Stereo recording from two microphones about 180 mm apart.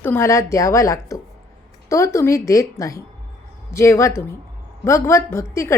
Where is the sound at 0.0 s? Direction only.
15° left (ahead or behind).